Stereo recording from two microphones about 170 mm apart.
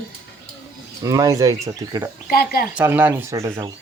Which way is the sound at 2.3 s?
65° left (ahead or behind).